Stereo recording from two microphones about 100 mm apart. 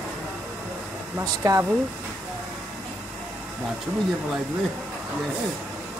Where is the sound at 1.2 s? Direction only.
35° right (ahead or behind).